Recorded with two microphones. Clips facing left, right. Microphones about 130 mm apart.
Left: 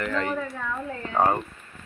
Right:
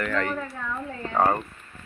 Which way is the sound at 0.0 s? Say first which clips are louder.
Even; 20° left (ahead or behind).